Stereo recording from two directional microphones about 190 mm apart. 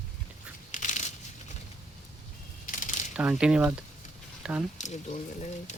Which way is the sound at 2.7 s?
40° left (ahead or behind).